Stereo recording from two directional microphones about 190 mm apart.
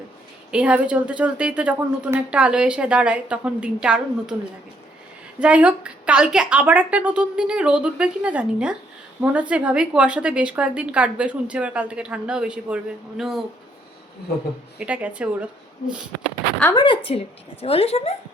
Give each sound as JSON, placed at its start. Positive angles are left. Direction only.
{"t": 0.5, "sound": "a woman's voice", "side_deg": -5}
{"t": 5.4, "sound": "a woman's voice", "side_deg": -5}
{"t": 14.8, "sound": "a woman's voice", "side_deg": -5}
{"t": 16.7, "sound": "a woman's voice", "side_deg": 25}